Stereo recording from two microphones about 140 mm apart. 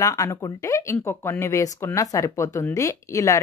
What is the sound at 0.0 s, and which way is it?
Speech, 25° left (ahead or behind).